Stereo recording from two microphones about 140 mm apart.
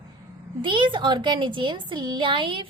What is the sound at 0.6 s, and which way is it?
A woman's voice, 35° right (ahead or behind).